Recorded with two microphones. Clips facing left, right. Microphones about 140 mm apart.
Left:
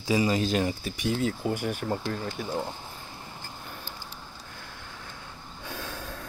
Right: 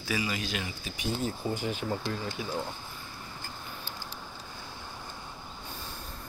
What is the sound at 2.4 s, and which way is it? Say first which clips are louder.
Speech: left 2 dB; 50° left (ahead or behind).